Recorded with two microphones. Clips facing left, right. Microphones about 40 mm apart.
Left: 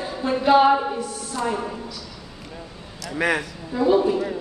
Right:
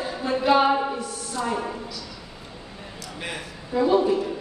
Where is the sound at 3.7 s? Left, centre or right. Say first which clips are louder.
Left 1 dB; centre.